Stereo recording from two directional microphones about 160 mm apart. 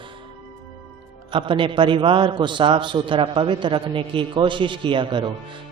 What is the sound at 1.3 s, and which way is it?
A man's voice, 30° right (ahead or behind).